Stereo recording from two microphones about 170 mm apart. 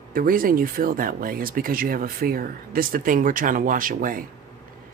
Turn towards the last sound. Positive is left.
turn(degrees=-55)  # may be behind; listen again after turning